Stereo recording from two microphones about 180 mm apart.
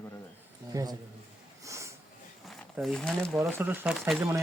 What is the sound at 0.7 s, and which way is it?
Speech, 20° right (ahead or behind).